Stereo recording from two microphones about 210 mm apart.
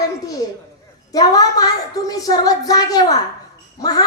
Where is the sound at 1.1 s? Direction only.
15° left (ahead or behind).